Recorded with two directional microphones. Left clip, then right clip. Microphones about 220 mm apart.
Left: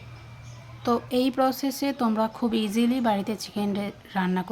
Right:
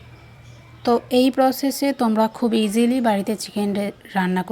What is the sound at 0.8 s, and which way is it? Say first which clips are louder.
Speech: right 7 dB; 20° right (ahead or behind).